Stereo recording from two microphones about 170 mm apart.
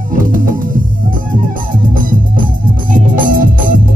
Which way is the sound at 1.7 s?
55° right (ahead or behind).